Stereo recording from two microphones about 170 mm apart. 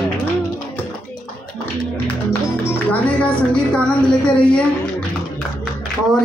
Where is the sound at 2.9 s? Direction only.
10° left (ahead or behind).